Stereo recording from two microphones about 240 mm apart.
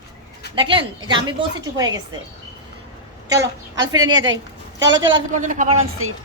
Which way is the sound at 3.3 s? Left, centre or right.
Centre.